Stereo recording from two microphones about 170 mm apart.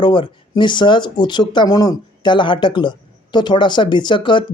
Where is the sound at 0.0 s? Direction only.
30° left (ahead or behind).